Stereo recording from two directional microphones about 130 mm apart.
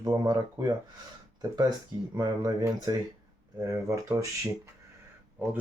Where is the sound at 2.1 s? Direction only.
30° right (ahead or behind).